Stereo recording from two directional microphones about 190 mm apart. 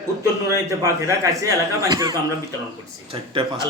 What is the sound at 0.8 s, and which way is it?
Speech, 15° right (ahead or behind).